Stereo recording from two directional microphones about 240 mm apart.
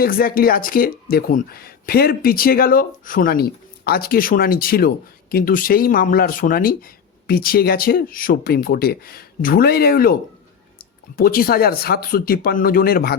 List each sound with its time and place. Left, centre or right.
0.0 s speech: left
11.2 s speech: left